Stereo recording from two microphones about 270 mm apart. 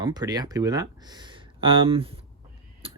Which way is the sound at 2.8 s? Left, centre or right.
Right.